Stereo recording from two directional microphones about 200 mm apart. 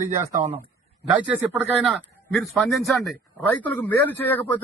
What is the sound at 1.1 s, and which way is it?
A man's voice, 5° right (ahead or behind).